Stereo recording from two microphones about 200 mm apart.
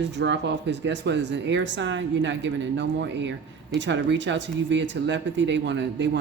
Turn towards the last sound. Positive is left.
turn(degrees=-60)  # may be behind; listen again after turning